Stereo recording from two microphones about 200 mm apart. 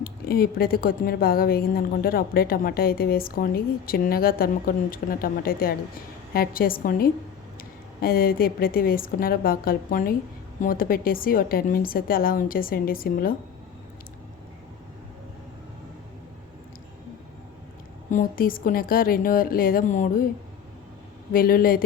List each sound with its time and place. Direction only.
0.0 s speech: 50° left (ahead or behind)
18.1 s speech: 45° left (ahead or behind)
21.3 s speech: 45° left (ahead or behind)